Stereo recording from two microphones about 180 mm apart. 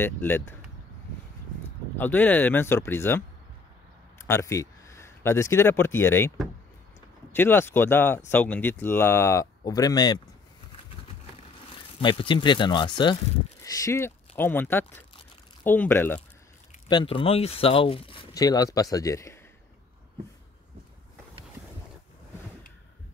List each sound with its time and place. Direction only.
0.0 s speech: 10° left (ahead or behind)
2.0 s speech: 10° left (ahead or behind)
7.3 s speech: 10° left (ahead or behind)
12.0 s speech: 25° left (ahead or behind); by 16.2 s 10° left (ahead or behind)
16.9 s speech: 30° left (ahead or behind)